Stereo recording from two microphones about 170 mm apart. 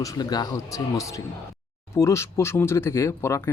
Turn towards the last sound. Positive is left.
turn(degrees=15)  # may be behind; listen again after turning